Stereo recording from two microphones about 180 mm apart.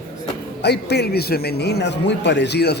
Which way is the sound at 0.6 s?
65° left (ahead or behind).